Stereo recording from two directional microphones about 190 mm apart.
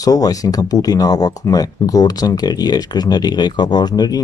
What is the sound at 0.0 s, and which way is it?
Speech, 20° left (ahead or behind).